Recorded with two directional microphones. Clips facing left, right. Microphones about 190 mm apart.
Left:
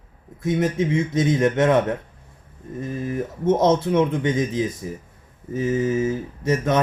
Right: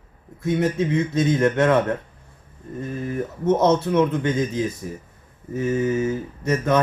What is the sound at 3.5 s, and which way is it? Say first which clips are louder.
Speech: even; 25° left (ahead or behind).